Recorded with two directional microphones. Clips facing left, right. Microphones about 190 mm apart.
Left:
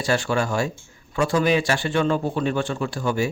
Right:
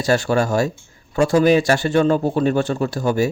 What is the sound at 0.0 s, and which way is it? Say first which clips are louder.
A man's voice: right 5 dB; 40° right (ahead or behind).